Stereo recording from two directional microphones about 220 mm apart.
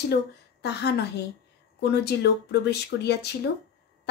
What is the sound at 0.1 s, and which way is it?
Speech, 50° left (ahead or behind).